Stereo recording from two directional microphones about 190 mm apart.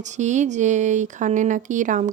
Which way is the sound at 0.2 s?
40° right (ahead or behind).